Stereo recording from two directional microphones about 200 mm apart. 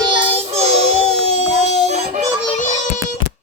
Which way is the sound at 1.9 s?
35° right (ahead or behind).